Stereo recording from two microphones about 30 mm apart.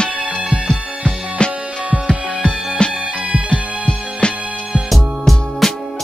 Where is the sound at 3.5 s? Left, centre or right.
Left.